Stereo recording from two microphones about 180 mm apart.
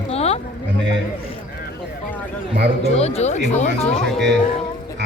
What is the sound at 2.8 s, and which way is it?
Speech, 35° left (ahead or behind).